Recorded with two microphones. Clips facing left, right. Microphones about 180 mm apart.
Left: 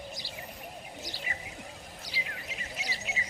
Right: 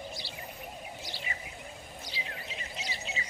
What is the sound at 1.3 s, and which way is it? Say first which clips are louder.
Music: even; 40° left (ahead or behind).